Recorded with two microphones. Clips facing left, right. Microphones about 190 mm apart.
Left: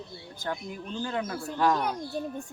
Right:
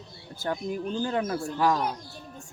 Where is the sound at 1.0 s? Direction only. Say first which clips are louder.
Right 2 dB; 30° right (ahead or behind).